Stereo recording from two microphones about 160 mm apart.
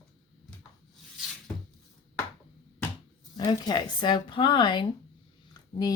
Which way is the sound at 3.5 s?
25° left (ahead or behind).